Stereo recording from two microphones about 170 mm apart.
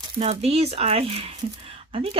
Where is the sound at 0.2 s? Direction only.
35° right (ahead or behind).